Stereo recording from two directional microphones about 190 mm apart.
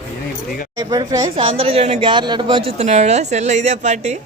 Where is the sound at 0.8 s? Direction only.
20° right (ahead or behind).